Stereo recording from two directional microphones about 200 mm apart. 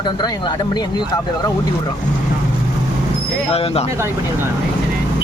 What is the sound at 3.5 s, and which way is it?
Speech, 30° left (ahead or behind).